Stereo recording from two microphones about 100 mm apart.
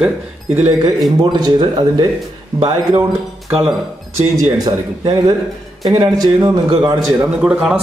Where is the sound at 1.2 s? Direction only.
45° right (ahead or behind).